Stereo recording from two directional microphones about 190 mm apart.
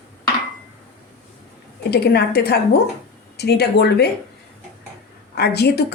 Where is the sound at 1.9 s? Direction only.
55° left (ahead or behind).